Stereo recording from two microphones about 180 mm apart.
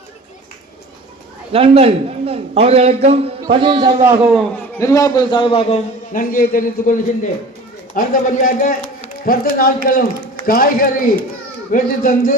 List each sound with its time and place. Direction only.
1.5 s a man's voice: 30° right (ahead or behind)
4.0 s a man's voice: 15° right (ahead or behind)
4.8 s a man's voice: 15° left (ahead or behind)
6.1 s a man's voice: 55° left (ahead or behind)
7.9 s a man's voice: 50° left (ahead or behind)